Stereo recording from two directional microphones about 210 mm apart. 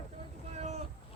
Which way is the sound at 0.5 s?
30° right (ahead or behind).